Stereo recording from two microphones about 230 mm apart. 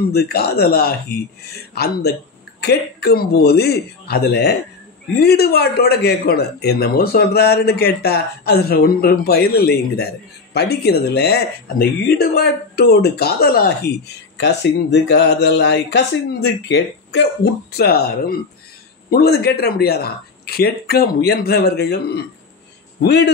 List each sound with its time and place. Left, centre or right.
0.1 s speech: left